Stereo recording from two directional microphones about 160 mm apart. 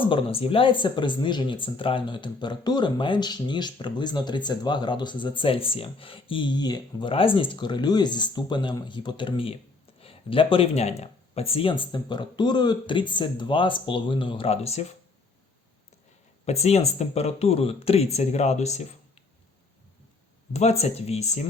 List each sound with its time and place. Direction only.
0.1 s speech: 35° left (ahead or behind)
16.5 s speech: 40° left (ahead or behind)
20.5 s speech: 45° left (ahead or behind)